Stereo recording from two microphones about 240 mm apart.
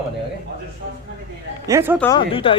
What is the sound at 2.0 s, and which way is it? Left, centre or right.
Speech, centre.